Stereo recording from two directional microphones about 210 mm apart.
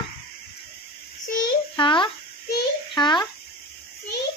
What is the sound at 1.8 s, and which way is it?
Babbling, 25° left (ahead or behind).